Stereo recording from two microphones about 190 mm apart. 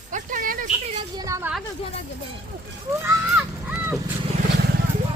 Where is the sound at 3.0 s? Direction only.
10° right (ahead or behind).